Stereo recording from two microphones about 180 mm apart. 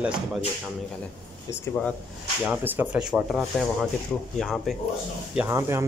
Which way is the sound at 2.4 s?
10° right (ahead or behind).